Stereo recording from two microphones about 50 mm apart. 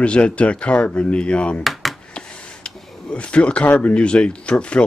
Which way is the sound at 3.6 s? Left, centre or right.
Left.